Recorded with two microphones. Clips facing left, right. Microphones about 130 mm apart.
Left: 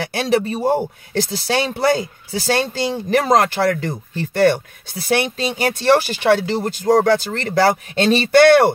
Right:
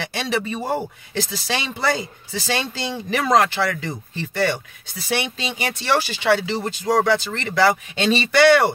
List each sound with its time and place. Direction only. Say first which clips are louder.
0.0 s speech: left 6 dB; 45° left (ahead or behind)